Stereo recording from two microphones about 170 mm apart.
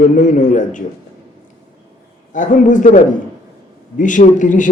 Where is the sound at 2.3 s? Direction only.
50° left (ahead or behind).